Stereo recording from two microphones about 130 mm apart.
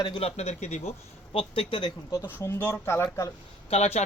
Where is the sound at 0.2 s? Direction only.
50° left (ahead or behind).